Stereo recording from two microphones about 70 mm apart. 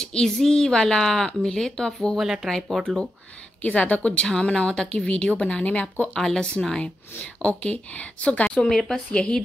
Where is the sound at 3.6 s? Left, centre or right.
Left.